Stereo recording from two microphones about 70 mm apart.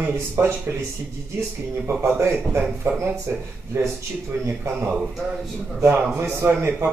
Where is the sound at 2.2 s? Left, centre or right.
Right.